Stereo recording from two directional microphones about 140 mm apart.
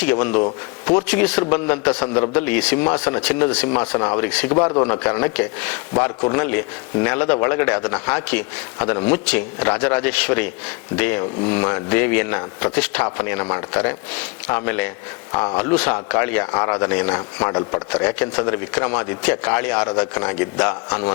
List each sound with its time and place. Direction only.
0.0 s a man's voice: 10° left (ahead or behind)
4.6 s a man's voice: 30° left (ahead or behind)
4.9 s a man's voice: 15° left (ahead or behind)
17.5 s speech: 30° left (ahead or behind)
17.9 s a man's voice: 10° left (ahead or behind)